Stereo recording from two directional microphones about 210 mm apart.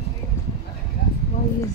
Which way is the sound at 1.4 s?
30° left (ahead or behind).